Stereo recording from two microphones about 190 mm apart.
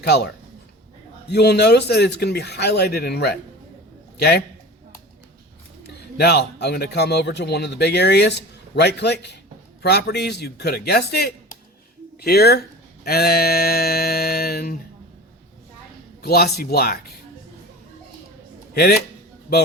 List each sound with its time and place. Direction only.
0.0 s speech: 60° left (ahead or behind)
1.3 s speech: 60° left (ahead or behind)
6.1 s speech: 60° left (ahead or behind)
13.1 s a sound: 55° left (ahead or behind)
16.2 s speech: 55° left (ahead or behind)
18.7 s speech: 55° left (ahead or behind)